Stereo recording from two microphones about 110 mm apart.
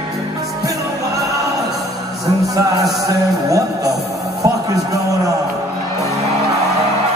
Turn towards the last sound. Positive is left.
turn(degrees=-30)  # may be behind; listen again after turning